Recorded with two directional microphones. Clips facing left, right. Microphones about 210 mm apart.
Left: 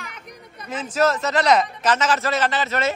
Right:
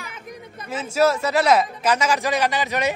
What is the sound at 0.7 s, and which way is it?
A man's voice, 10° right (ahead or behind).